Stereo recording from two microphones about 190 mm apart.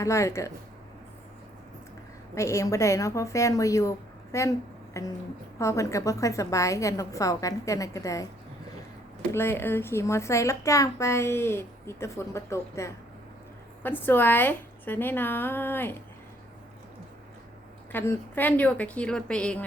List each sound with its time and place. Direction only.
0.0 s a woman's voice: 15° left (ahead or behind)
2.3 s a woman's voice: 15° left (ahead or behind)
9.3 s a woman's voice: 10° left (ahead or behind)
17.9 s a woman's voice: 10° left (ahead or behind)